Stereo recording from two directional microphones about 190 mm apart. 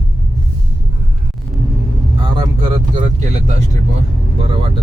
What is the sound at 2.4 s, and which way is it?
Speech, 25° right (ahead or behind).